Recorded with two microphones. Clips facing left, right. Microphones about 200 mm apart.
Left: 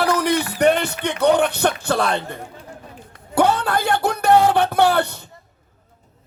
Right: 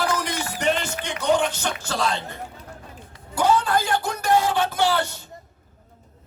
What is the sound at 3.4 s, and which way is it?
Music, 60° left (ahead or behind).